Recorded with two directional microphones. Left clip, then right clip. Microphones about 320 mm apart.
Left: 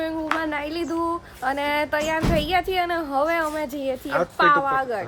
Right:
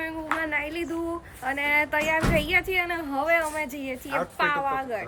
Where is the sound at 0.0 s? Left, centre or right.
Centre.